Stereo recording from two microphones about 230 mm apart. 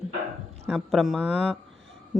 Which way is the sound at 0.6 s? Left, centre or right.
Centre.